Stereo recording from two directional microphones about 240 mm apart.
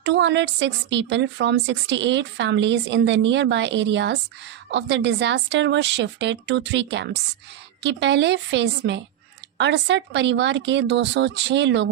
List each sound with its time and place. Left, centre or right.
0.0 s speech: right